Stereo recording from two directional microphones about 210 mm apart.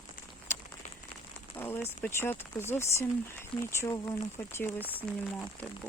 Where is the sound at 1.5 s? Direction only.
10° left (ahead or behind).